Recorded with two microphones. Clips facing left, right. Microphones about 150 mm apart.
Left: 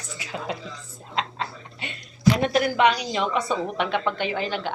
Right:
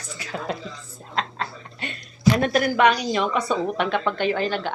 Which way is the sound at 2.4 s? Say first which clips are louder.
Right 2 dB; 20° left (ahead or behind).